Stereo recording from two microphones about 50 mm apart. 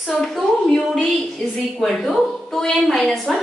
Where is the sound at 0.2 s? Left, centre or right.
Centre.